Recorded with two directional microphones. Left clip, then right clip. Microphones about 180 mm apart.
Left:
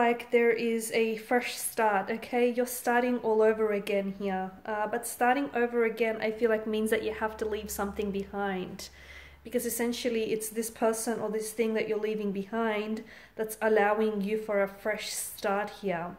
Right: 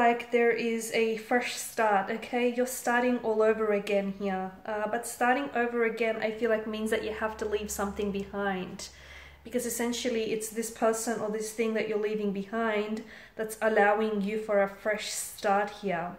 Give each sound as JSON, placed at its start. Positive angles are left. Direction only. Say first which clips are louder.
{"t": 0.0, "sound": "a woman's voice", "louder": "right 1 dB", "side_deg": 40}